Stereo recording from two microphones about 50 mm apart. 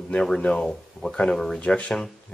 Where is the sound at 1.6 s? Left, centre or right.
Left.